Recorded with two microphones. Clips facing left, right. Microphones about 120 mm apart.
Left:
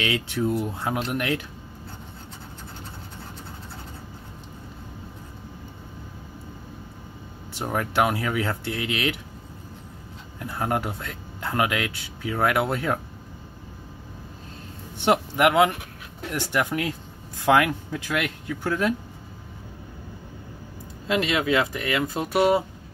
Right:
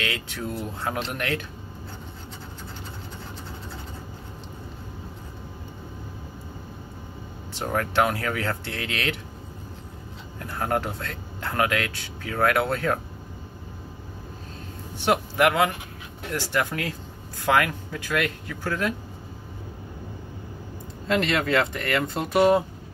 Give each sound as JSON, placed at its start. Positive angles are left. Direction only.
{"t": 0.1, "sound": "speech", "side_deg": 20}
{"t": 7.6, "sound": "speech", "side_deg": 15}
{"t": 10.4, "sound": "speech", "side_deg": 15}
{"t": 15.0, "sound": "speech", "side_deg": 15}
{"t": 17.6, "sound": "speech", "side_deg": 15}
{"t": 21.1, "sound": "speech", "side_deg": 5}